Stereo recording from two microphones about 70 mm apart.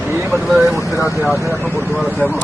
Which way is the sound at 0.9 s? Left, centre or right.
Left.